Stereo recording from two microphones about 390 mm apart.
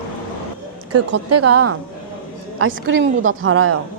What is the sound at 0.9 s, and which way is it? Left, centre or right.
A woman's voice, right.